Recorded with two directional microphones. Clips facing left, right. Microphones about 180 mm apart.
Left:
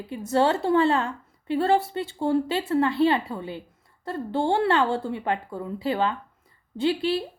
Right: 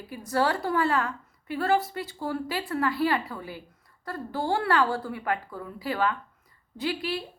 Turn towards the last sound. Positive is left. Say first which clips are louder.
# left 6 dB
turn(degrees=25)  # may be behind; listen again after turning